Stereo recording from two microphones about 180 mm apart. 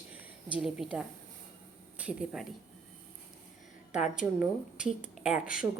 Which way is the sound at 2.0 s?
5° right (ahead or behind).